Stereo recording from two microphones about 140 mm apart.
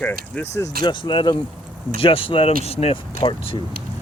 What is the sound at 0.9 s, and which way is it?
Speech, 35° left (ahead or behind).